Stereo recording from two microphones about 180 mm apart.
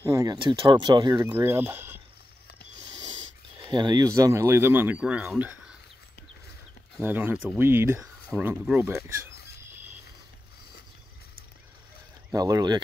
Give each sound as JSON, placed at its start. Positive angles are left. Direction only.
{"t": 0.0, "sound": "speech", "side_deg": -20}
{"t": 3.6, "sound": "speech", "side_deg": -20}
{"t": 5.4, "sound": "a sound", "side_deg": -10}
{"t": 7.0, "sound": "speech", "side_deg": -10}
{"t": 12.3, "sound": "speech", "side_deg": -20}